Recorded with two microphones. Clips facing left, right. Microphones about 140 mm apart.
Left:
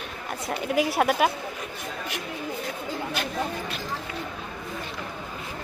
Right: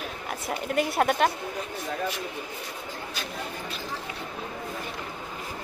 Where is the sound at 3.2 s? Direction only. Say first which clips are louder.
Left 5 dB; 65° left (ahead or behind).